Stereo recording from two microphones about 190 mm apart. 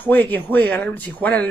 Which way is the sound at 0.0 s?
10° left (ahead or behind).